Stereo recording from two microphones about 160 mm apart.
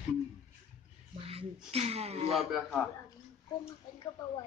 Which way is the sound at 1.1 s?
35° right (ahead or behind).